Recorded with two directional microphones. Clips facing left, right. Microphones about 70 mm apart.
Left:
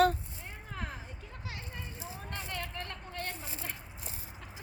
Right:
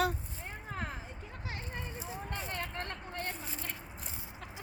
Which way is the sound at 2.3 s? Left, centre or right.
Right.